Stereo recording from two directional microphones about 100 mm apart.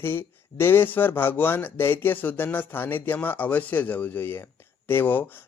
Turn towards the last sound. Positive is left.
turn(degrees=20)  # may be behind; listen again after turning